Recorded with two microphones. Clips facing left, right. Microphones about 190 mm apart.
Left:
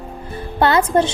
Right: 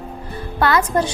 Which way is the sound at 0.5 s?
25° left (ahead or behind).